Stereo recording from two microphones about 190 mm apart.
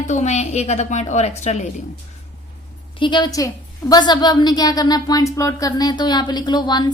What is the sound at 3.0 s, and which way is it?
A woman's voice, 25° left (ahead or behind).